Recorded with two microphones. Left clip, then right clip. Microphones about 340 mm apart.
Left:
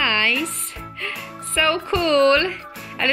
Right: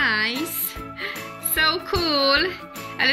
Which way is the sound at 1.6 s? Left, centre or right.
Centre.